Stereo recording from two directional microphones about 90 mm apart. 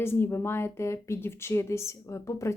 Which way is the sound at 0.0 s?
25° left (ahead or behind).